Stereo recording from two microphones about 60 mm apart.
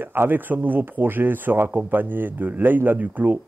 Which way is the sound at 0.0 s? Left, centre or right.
Right.